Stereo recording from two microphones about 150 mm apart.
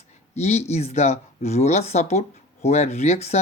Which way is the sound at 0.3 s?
45° left (ahead or behind).